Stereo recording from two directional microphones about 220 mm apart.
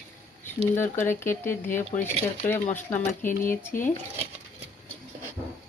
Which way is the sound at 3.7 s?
40° left (ahead or behind).